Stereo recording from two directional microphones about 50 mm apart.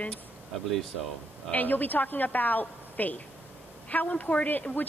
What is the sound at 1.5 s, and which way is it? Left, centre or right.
A woman's voice, left.